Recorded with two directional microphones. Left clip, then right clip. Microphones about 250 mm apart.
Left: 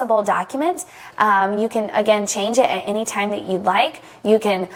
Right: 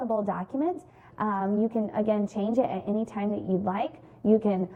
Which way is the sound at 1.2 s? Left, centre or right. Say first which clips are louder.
Left 12 dB; centre.